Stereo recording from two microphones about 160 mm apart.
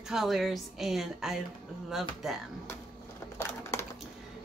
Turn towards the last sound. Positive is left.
turn(degrees=15)  # may be behind; listen again after turning